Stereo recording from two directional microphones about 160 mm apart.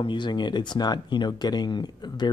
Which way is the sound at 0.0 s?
30° left (ahead or behind).